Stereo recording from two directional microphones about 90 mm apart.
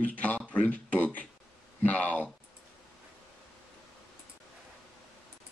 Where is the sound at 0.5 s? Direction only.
15° left (ahead or behind).